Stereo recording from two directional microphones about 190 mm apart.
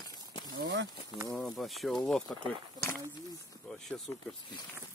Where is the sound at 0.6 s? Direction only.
60° right (ahead or behind).